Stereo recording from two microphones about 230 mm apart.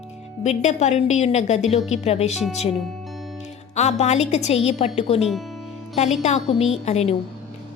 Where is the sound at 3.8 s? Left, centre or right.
Left.